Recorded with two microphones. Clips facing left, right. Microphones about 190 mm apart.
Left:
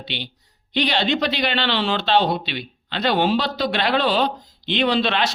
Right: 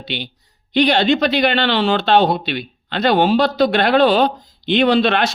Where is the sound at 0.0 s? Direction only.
50° right (ahead or behind).